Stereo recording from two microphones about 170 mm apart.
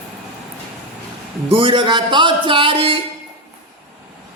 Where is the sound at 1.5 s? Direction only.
30° right (ahead or behind).